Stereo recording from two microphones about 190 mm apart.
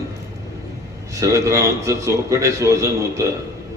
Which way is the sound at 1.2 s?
15° right (ahead or behind).